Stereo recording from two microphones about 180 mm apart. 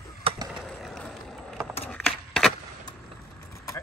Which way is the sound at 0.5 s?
Centre (ahead or behind).